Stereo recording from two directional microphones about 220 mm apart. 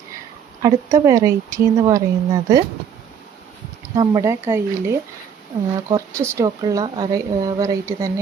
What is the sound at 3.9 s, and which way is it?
Speech, 15° right (ahead or behind).